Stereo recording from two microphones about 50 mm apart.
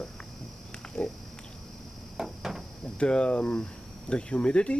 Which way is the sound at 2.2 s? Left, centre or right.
Centre.